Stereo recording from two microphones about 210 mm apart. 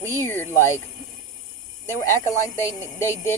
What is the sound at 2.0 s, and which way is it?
Speech, 15° left (ahead or behind).